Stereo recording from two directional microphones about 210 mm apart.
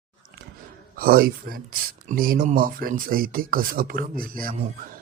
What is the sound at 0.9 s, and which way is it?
Speech, 45° right (ahead or behind).